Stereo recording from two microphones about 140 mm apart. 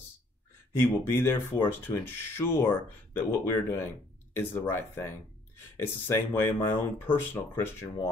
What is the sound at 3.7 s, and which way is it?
Speech, 20° left (ahead or behind).